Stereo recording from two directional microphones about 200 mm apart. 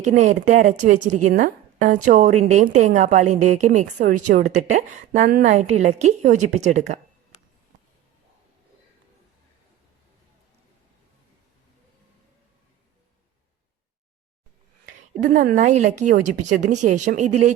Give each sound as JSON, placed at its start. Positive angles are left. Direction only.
{"t": 0.2, "sound": "a woman's voice", "side_deg": -40}
{"t": 15.2, "sound": "a woman's voice", "side_deg": -40}